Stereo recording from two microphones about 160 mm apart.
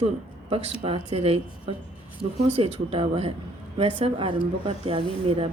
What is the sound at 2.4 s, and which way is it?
Speech, 40° right (ahead or behind).